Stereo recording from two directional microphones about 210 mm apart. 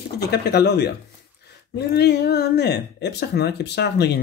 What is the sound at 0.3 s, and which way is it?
Speech, 50° left (ahead or behind).